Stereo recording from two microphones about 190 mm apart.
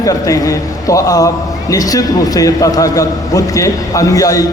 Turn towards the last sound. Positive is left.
turn(degrees=15)  # may be behind; listen again after turning